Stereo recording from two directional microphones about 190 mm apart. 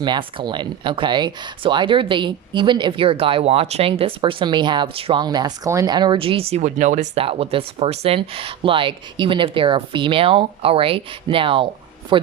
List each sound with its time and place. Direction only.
0.0 s speech: 25° right (ahead or behind)